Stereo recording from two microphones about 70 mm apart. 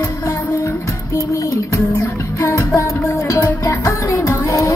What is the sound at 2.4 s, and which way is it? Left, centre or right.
Music, left.